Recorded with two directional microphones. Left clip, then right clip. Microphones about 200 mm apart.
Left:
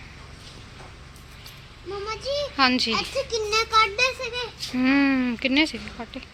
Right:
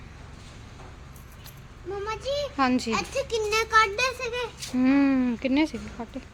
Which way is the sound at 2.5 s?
10° right (ahead or behind).